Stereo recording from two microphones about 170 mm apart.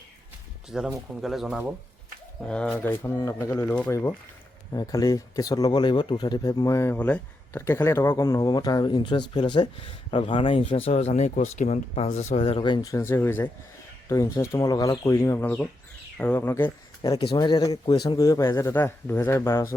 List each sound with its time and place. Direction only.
0.7 s speech: 5° right (ahead or behind); by 16.7 s 10° left (ahead or behind)
17.0 s speech: 30° left (ahead or behind)